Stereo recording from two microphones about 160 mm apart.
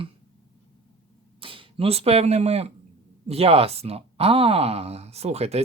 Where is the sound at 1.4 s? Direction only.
35° right (ahead or behind).